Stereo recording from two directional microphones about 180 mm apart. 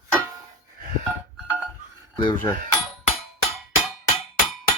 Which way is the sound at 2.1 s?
20° left (ahead or behind).